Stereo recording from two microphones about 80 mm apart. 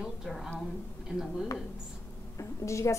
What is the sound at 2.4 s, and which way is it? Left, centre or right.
Speech, left.